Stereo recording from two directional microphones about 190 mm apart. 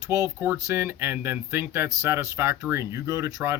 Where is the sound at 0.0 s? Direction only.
15° right (ahead or behind).